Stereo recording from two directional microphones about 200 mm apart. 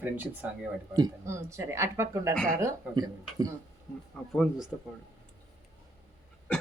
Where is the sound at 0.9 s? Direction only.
15° right (ahead or behind).